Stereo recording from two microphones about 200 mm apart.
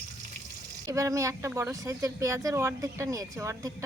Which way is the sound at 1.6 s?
15° right (ahead or behind).